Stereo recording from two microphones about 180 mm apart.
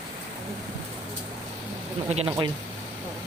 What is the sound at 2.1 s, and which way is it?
Speech, 35° right (ahead or behind).